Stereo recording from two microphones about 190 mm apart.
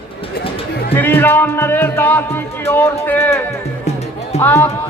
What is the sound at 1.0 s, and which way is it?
Music, 10° left (ahead or behind).